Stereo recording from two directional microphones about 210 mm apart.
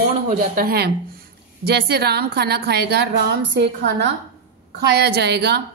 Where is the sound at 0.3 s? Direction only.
45° right (ahead or behind).